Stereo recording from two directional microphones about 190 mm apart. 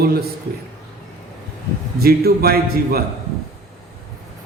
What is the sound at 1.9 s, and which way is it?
A man's voice, 55° right (ahead or behind).